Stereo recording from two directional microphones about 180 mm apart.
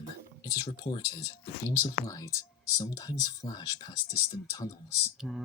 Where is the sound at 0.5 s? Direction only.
25° left (ahead or behind).